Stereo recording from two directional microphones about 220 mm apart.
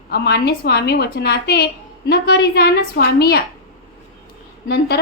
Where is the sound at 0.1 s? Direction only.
50° left (ahead or behind).